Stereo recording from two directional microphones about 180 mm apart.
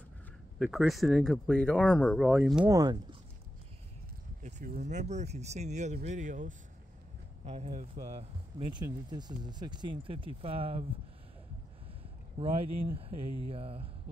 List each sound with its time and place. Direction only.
0.6 s speech: centre (ahead or behind)
2.7 s speech: 20° right (ahead or behind)
4.4 s speech: 45° right (ahead or behind)
12.4 s speech: 30° right (ahead or behind)